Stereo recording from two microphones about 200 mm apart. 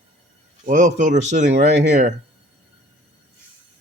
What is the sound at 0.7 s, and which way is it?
Speech, 40° right (ahead or behind).